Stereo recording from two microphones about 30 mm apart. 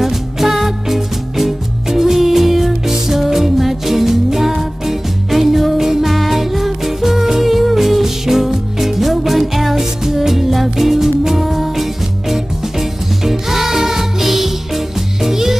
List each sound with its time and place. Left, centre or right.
0.0 s music: centre